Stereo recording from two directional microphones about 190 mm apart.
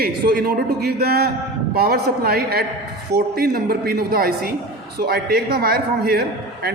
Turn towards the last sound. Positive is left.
turn(degrees=-55)  # may be behind; listen again after turning